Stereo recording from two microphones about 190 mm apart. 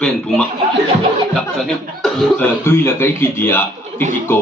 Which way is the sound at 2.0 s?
5° left (ahead or behind).